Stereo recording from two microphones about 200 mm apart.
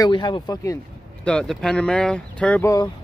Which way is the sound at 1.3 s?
5° left (ahead or behind).